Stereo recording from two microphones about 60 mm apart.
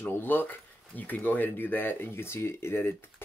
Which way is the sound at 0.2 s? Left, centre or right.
Left.